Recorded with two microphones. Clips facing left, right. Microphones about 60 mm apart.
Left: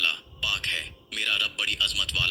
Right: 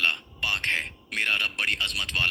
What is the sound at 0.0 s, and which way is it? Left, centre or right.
A man's voice, right.